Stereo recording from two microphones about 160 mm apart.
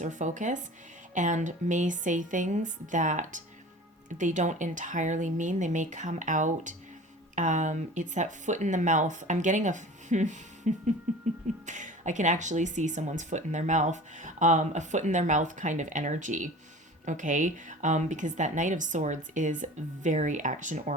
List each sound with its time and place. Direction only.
0.0 s speech: 50° right (ahead or behind)